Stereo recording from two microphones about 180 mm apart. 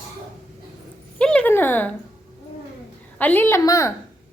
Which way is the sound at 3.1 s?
10° left (ahead or behind).